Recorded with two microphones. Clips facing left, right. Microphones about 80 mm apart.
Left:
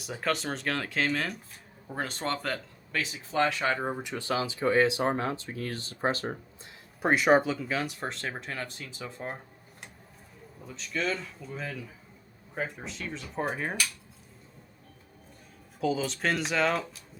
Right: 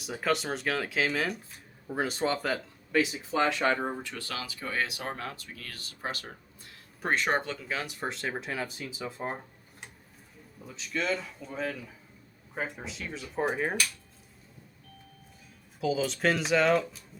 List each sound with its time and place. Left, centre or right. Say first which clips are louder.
0.0 s speech: right 1 dB; centre; by 6.4 s left
7.0 s speech: left 6 dB; centre
10.7 s speech: even; centre
15.8 s speech: right 1 dB; centre